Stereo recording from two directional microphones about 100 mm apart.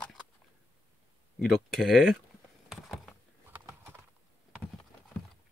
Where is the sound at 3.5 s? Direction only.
20° right (ahead or behind).